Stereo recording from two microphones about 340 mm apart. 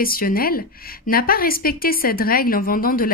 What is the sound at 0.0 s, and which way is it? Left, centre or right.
A woman's voice, left.